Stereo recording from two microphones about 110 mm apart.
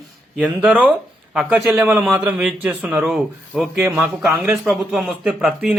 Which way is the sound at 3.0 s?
Centre (ahead or behind).